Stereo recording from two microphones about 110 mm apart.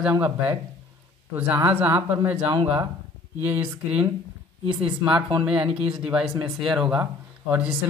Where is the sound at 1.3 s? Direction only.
20° right (ahead or behind).